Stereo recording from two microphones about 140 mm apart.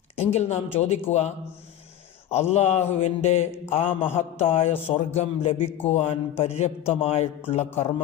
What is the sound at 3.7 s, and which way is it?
Mantra, 40° left (ahead or behind).